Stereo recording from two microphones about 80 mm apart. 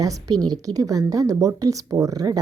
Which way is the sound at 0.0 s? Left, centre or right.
Right.